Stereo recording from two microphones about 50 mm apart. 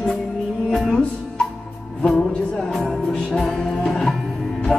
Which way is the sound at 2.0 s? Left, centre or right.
Left.